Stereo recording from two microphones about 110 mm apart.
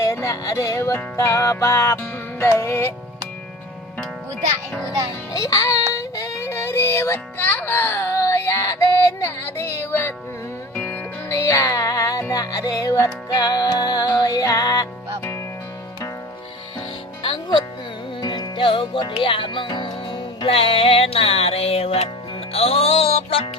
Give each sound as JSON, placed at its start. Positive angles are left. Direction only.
{"t": 0.0, "sound": "music", "side_deg": 30}
{"t": 5.3, "sound": "music", "side_deg": 30}
{"t": 11.3, "sound": "music", "side_deg": 30}
{"t": 17.2, "sound": "music", "side_deg": 50}